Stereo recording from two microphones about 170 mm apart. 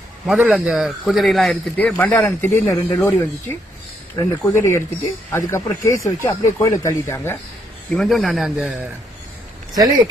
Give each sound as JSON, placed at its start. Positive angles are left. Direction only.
{"t": 0.3, "sound": "speech", "side_deg": -5}
{"t": 7.9, "sound": "speech", "side_deg": 0}